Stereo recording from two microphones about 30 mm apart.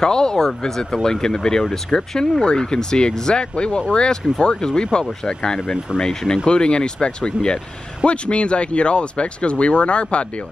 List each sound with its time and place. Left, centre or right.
0.0 s speech: left
0.7 s speech: centre; by 10.2 s left